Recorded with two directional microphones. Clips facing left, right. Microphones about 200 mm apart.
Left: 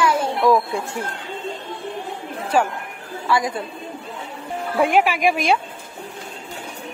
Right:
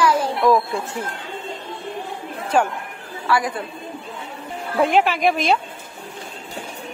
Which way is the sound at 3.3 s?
20° left (ahead or behind).